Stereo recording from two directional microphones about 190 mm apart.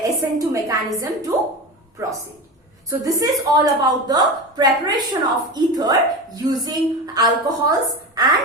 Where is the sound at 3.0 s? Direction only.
15° right (ahead or behind).